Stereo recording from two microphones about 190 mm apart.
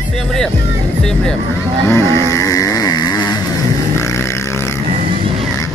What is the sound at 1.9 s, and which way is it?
Vehicle, 15° left (ahead or behind).